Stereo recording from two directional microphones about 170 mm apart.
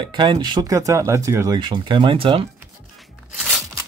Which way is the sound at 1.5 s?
25° right (ahead or behind).